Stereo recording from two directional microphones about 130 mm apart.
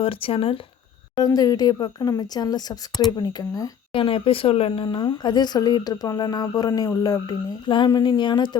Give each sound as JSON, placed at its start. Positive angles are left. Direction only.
{"t": 0.0, "sound": "speech", "side_deg": 45}
{"t": 1.1, "sound": "speech", "side_deg": 30}
{"t": 3.9, "sound": "speech", "side_deg": 45}